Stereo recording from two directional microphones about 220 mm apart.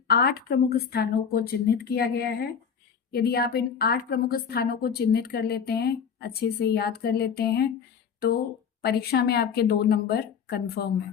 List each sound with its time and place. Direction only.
0.1 s a woman's voice: 45° left (ahead or behind)
8.8 s a woman's voice: 45° left (ahead or behind)